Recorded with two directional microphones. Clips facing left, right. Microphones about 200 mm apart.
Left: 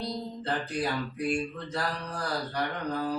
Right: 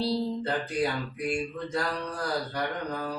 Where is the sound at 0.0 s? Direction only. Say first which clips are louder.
Right 7 dB; 30° right (ahead or behind).